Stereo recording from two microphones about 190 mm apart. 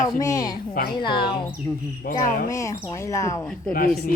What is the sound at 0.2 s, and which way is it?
A woman's voice, 20° left (ahead or behind).